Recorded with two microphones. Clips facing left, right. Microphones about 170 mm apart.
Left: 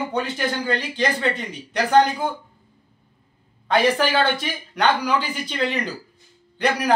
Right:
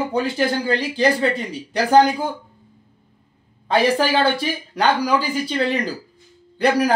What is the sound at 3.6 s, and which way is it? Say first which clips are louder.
A man's voice: right 1 dB; 35° right (ahead or behind).